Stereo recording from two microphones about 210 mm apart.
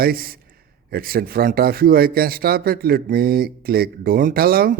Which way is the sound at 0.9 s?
45° right (ahead or behind).